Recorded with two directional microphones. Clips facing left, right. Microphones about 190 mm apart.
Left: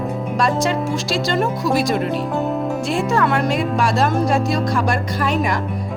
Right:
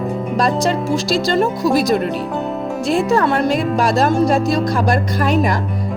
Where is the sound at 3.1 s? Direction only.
35° right (ahead or behind).